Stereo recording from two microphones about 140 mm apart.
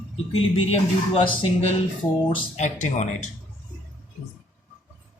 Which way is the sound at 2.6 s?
60° left (ahead or behind).